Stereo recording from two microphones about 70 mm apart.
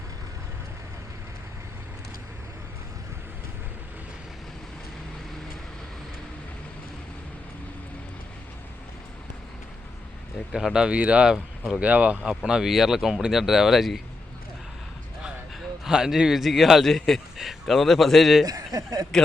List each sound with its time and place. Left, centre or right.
10.5 s speech: centre; by 12.2 s right
12.5 s a man's voice: centre
15.8 s a man's voice: centre
18.4 s speech: right